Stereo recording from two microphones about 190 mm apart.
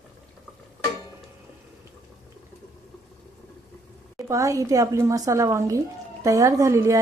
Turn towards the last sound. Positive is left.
turn(degrees=-15)  # may be behind; listen again after turning